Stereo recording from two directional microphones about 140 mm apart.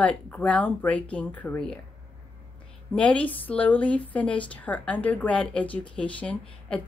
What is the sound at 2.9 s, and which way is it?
A woman's voice, 10° left (ahead or behind).